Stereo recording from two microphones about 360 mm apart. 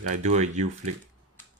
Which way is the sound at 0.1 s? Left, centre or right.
Centre.